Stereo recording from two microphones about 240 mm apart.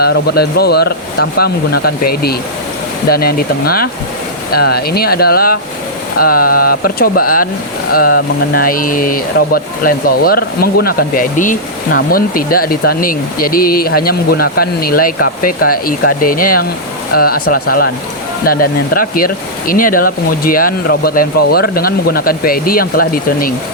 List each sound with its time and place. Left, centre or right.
0.0 s speech: left